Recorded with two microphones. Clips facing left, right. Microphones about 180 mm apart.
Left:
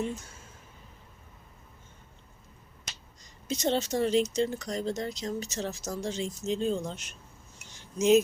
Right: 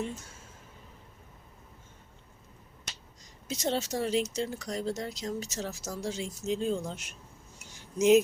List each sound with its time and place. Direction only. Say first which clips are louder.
3.4 s speech: left 3 dB; 5° right (ahead or behind)